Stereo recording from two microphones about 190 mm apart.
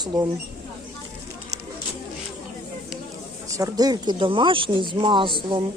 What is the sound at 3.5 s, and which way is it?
Speech, 20° right (ahead or behind).